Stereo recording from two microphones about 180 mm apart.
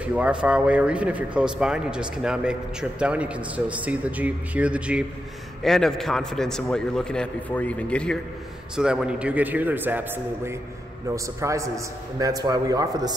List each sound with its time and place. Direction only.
0.0 s a man's voice: 5° right (ahead or behind)
8.7 s a man's voice: 5° right (ahead or behind); by 13.1 s 20° right (ahead or behind)